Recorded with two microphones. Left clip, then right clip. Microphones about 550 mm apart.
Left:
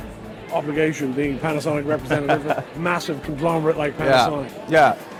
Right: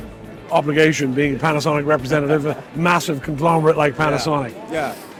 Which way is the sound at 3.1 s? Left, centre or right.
Right.